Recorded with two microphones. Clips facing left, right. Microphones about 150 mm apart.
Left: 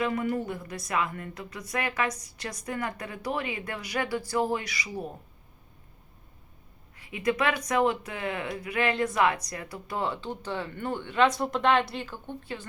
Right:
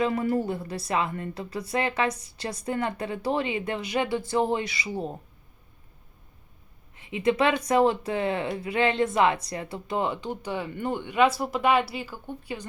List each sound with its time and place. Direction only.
0.0 s speech: 30° right (ahead or behind)
6.9 s speech: 25° right (ahead or behind)